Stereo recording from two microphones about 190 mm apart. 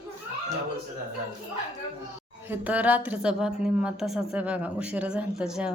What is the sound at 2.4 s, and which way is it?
A woman's voice, 10° right (ahead or behind).